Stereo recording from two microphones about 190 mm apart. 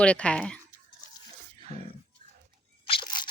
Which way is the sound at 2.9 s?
25° left (ahead or behind).